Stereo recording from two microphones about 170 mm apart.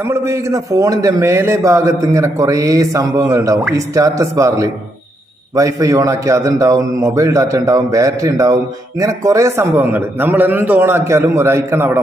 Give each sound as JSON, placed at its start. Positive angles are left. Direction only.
{"t": 0.1, "sound": "a man's voice", "side_deg": -20}